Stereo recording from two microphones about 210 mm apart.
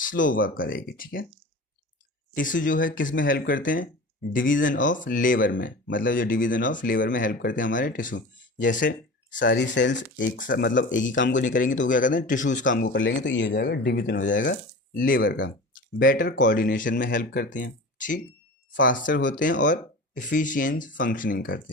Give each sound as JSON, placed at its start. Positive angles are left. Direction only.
{"t": 0.0, "sound": "speech", "side_deg": 40}
{"t": 2.3, "sound": "speech", "side_deg": 40}
{"t": 9.4, "sound": "speech", "side_deg": 55}
{"t": 10.3, "sound": "speech", "side_deg": 40}
{"t": 11.1, "sound": "speech", "side_deg": 60}
{"t": 11.3, "sound": "speech", "side_deg": 40}
{"t": 12.8, "sound": "speech", "side_deg": 60}
{"t": 13.5, "sound": "speech", "side_deg": 50}
{"t": 14.3, "sound": "speech", "side_deg": 60}
{"t": 14.9, "sound": "speech", "side_deg": 45}